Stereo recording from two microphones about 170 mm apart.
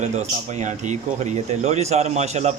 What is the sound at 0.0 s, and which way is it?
Speech, 40° right (ahead or behind).